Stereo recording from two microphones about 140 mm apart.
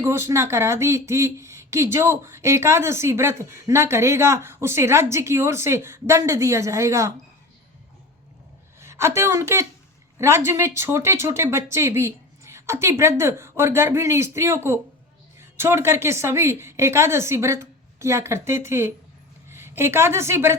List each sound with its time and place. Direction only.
0.0 s speech: 20° right (ahead or behind)
8.8 s a woman's voice: 20° right (ahead or behind)